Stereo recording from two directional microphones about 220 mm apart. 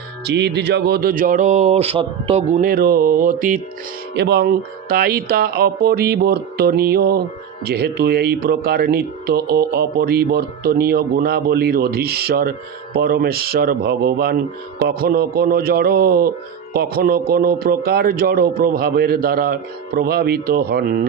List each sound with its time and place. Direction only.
0.3 s speech: 50° right (ahead or behind)
4.1 s speech: 50° right (ahead or behind)